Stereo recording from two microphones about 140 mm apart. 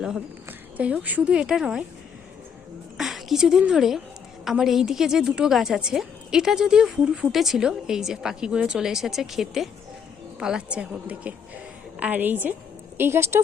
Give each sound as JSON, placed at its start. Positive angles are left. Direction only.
{"t": 0.8, "sound": "speech", "side_deg": -10}
{"t": 3.0, "sound": "a woman's voice", "side_deg": 0}